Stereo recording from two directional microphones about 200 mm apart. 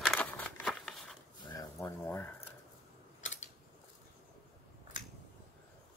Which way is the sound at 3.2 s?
35° left (ahead or behind).